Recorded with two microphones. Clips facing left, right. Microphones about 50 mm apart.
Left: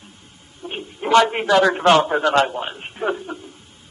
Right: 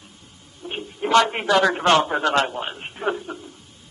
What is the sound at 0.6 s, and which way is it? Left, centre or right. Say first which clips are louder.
Speech: left 1 dB; left.